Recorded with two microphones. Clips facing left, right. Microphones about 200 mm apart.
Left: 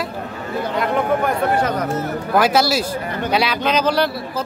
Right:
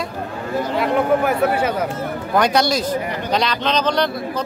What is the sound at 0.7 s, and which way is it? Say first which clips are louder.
Speech: right 2 dB; 5° right (ahead or behind).